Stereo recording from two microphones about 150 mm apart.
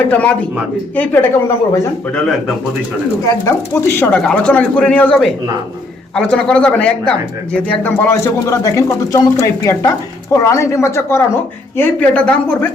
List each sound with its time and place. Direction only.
0.1 s speech: 10° left (ahead or behind)
3.2 s speech: 20° left (ahead or behind)
10.3 s speech: 20° left (ahead or behind)